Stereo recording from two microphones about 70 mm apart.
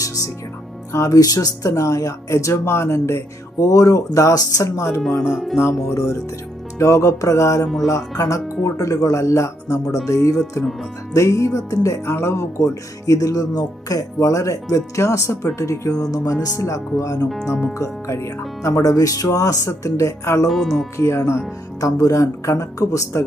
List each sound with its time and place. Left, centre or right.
0.9 s speech: left
16.6 s speech: left
17.2 s speech: centre
17.7 s speech: left
20.5 s speech: centre
21.0 s speech: left
21.8 s speech: left